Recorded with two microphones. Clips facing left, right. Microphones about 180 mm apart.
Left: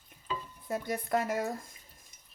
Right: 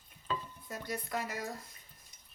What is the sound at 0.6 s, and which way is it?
Speech, 50° left (ahead or behind).